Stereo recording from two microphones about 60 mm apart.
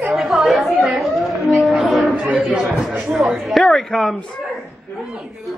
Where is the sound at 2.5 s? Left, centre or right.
Centre.